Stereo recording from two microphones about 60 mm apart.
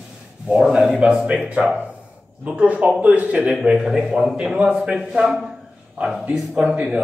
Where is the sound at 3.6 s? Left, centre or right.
Centre.